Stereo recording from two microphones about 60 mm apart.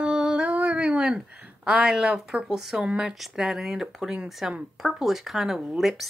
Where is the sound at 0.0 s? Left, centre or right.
Centre.